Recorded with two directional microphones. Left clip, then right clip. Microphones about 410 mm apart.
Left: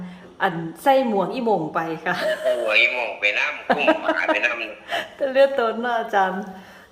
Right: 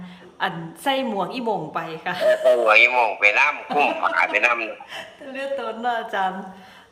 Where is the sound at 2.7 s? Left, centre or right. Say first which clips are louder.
Right 4 dB; right.